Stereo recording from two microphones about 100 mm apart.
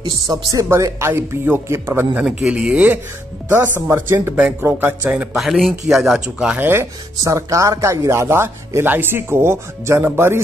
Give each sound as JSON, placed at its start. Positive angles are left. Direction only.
{"t": 0.0, "sound": "speech", "side_deg": -40}
{"t": 2.4, "sound": "speech", "side_deg": -10}
{"t": 5.3, "sound": "speech", "side_deg": 0}
{"t": 6.6, "sound": "speech", "side_deg": -25}